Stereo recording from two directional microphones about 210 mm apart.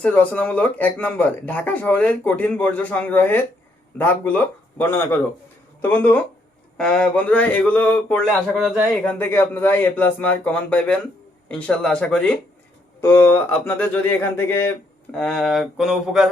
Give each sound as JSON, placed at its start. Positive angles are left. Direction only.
{"t": 0.0, "sound": "speech", "side_deg": 5}